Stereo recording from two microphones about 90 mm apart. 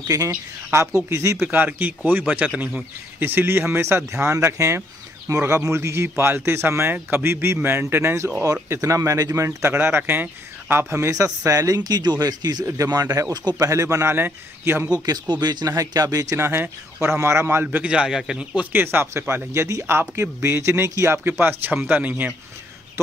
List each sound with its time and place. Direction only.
0.7 s speech: 30° right (ahead or behind)
1.4 s speech: 20° right (ahead or behind)
15.4 s speech: 45° right (ahead or behind)
17.6 s speech: 15° right (ahead or behind)